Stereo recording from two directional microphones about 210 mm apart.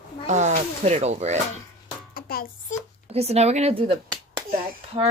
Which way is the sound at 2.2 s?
45° left (ahead or behind).